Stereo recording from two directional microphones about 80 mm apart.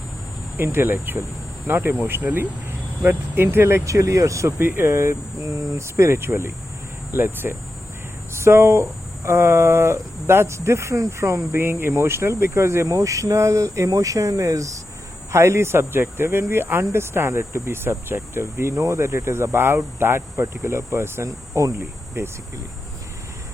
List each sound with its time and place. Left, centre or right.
0.5 s speech: right
21.8 s cricket: right